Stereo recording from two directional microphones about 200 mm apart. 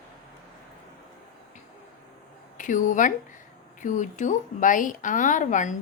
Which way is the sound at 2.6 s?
40° left (ahead or behind).